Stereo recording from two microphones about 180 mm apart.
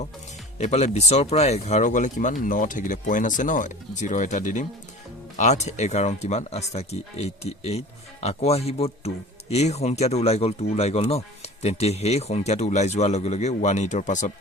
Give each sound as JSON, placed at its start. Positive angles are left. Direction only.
{"t": 0.6, "sound": "speech", "side_deg": 40}